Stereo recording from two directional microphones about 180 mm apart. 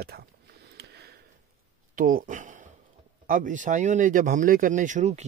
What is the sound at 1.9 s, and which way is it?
Speech, 50° right (ahead or behind).